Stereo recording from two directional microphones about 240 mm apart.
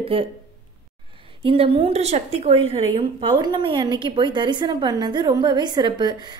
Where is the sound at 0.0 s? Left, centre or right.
Right.